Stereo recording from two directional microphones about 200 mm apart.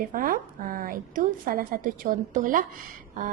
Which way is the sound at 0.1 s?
45° right (ahead or behind).